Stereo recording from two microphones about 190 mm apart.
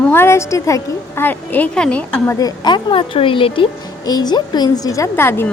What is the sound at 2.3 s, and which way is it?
A woman's voice, 20° left (ahead or behind).